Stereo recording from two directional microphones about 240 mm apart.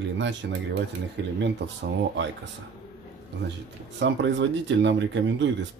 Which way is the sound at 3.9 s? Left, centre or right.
Right.